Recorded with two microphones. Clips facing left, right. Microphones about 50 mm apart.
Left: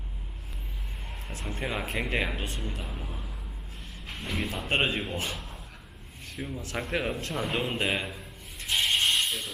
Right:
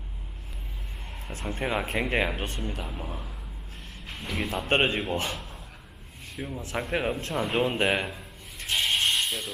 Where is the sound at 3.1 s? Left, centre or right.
Centre.